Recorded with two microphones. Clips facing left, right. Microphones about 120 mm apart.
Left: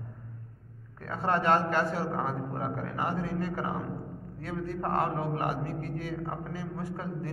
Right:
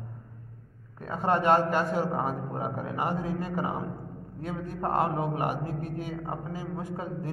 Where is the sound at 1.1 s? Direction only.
15° right (ahead or behind).